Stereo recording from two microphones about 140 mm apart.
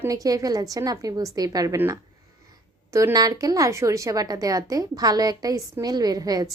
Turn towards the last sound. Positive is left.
turn(degrees=-25)  # may be behind; listen again after turning